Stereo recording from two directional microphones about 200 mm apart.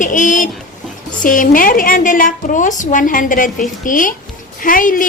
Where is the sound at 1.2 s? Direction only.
45° left (ahead or behind).